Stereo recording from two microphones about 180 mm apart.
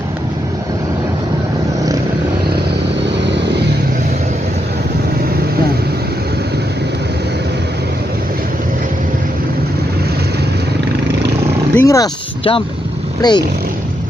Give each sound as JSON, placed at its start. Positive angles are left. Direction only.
{"t": 11.7, "sound": "vehicle", "side_deg": 15}
{"t": 13.2, "sound": "speech", "side_deg": 20}